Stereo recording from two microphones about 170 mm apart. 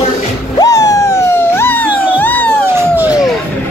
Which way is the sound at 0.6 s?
20° left (ahead or behind).